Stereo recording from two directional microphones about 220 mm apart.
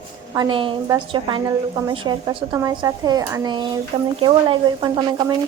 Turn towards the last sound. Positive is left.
turn(degrees=-20)  # may be behind; listen again after turning